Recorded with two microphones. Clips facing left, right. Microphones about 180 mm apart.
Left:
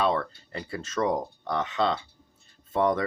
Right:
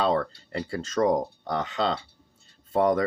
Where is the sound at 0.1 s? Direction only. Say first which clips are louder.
Right 3 dB; 35° right (ahead or behind).